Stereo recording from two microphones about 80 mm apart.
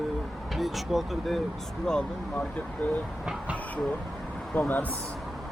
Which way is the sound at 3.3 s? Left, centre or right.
Centre.